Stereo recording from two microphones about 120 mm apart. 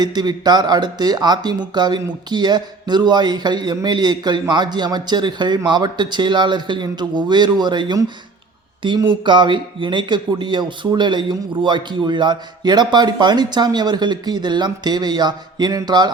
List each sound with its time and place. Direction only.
0.0 s speech: 35° right (ahead or behind)